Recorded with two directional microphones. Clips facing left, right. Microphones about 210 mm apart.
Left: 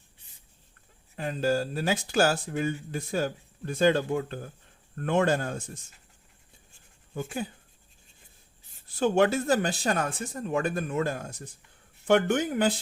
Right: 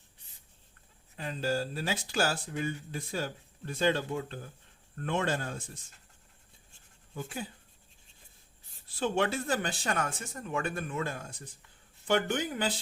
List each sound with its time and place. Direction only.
1.1 s speech: 50° left (ahead or behind)
7.1 s speech: 50° left (ahead or behind)
9.0 s speech: 45° left (ahead or behind)